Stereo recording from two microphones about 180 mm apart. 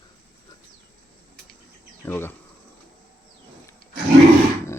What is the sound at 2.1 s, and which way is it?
Speech, 10° left (ahead or behind).